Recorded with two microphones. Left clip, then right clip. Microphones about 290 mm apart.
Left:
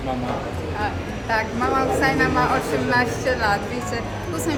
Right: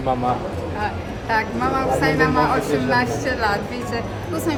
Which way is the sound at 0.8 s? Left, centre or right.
Centre.